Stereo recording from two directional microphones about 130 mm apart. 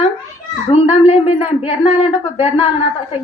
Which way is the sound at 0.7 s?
50° left (ahead or behind).